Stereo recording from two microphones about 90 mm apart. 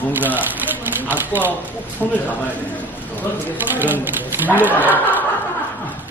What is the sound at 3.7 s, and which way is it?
Speech, 20° right (ahead or behind).